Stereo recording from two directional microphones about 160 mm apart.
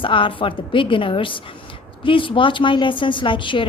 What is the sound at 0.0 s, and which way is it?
A woman's voice, 30° left (ahead or behind).